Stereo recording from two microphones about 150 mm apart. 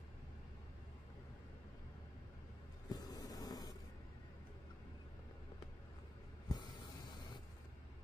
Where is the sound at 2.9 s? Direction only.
25° left (ahead or behind).